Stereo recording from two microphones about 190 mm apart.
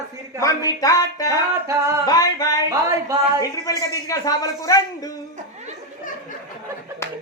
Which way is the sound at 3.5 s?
20° left (ahead or behind).